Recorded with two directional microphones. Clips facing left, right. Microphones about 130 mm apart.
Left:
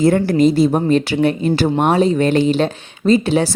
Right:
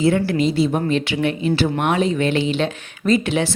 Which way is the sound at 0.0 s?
45° left (ahead or behind).